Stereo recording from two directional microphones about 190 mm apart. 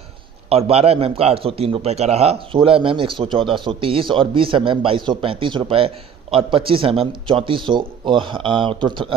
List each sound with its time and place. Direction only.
0.5 s a man's voice: 30° right (ahead or behind)